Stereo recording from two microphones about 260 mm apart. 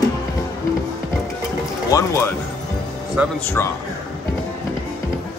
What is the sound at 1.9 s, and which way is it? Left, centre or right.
Speech, centre.